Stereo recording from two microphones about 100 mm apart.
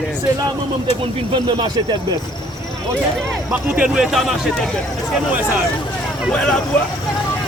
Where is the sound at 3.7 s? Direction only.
10° right (ahead or behind).